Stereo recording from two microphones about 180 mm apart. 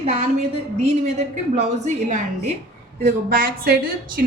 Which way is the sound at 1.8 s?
40° right (ahead or behind).